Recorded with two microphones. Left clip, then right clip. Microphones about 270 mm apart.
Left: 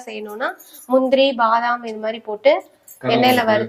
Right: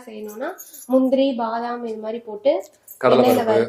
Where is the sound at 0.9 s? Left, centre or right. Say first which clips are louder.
Left 3 dB; left.